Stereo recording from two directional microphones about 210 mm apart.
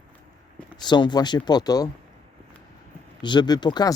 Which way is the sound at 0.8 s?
20° left (ahead or behind).